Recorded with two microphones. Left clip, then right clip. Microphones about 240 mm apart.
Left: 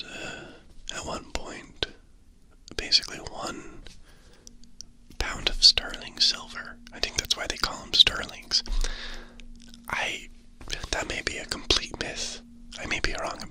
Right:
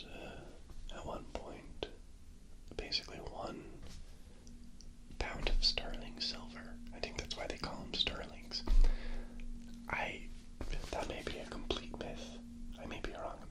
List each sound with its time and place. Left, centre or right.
0.0 s gasp: left
0.9 s whispering: left